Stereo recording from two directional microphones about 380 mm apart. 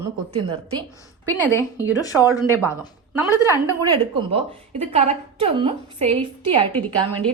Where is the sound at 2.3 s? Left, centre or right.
Centre.